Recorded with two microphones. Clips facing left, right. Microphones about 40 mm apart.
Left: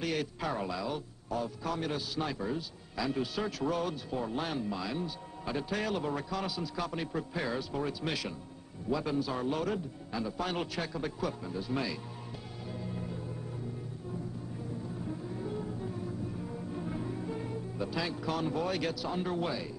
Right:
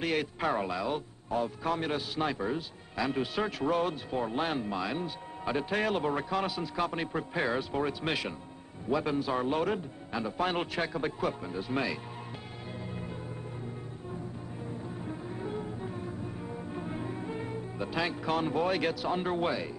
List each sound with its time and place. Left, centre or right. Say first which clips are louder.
0.0 s a man's voice: right 3 dB; right
12.8 s music: left 1 dB; right
15.0 s music: even; right